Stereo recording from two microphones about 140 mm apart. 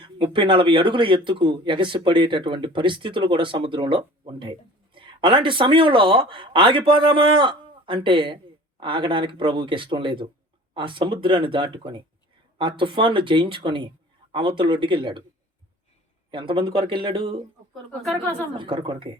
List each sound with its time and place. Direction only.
0.0 s speech: 35° right (ahead or behind)
16.3 s speech: 35° right (ahead or behind)
18.0 s speech: 10° left (ahead or behind)
18.5 s speech: 35° right (ahead or behind)